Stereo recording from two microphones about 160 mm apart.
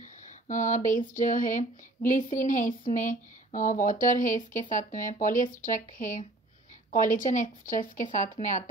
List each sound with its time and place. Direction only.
0.5 s speech: 50° left (ahead or behind)